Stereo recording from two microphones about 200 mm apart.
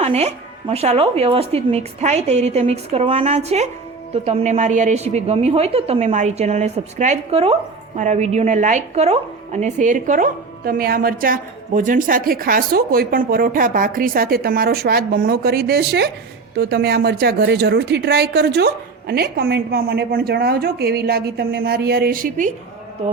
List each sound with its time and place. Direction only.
0.0 s a woman's voice: 30° right (ahead or behind)